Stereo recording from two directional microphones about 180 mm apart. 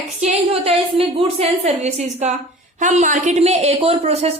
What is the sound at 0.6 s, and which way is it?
A woman's voice, 30° right (ahead or behind).